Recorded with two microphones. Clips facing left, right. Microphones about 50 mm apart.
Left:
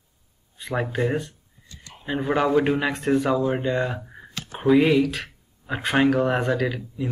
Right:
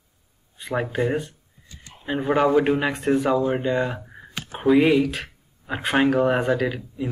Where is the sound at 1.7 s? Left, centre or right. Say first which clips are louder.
Even; centre.